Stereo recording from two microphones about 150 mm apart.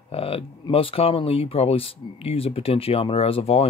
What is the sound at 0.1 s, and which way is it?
Speech, 40° left (ahead or behind).